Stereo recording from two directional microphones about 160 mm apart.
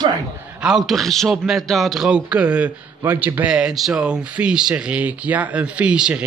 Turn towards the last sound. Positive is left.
turn(degrees=-5)  # may be behind; listen again after turning